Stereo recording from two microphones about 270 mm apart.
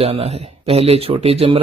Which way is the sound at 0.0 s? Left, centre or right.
Right.